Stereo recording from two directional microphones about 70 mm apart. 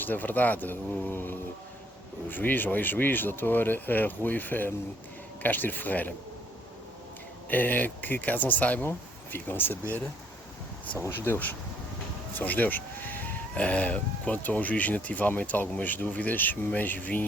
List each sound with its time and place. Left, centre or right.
0.0 s speech: left
7.5 s speech: left
11.0 s speech: left
12.4 s sheep: left
13.5 s speech: centre